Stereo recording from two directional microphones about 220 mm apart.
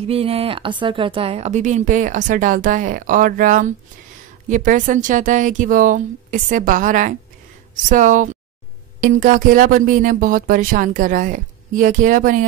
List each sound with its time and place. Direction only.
0.0 s speech: 25° right (ahead or behind)